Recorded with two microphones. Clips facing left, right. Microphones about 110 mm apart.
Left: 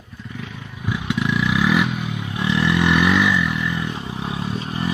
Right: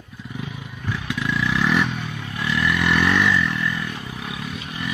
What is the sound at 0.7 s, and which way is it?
Vehicle, 10° left (ahead or behind).